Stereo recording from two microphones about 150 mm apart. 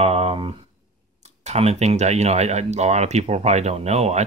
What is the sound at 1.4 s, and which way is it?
Speech, 45° right (ahead or behind).